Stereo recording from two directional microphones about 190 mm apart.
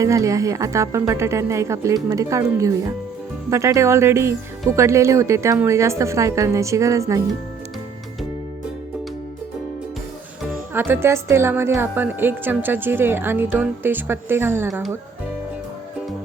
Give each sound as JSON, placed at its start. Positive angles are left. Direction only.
{"t": 0.0, "sound": "a woman's voice", "side_deg": -15}
{"t": 10.8, "sound": "a woman's voice", "side_deg": -10}
{"t": 14.7, "sound": "speech", "side_deg": 0}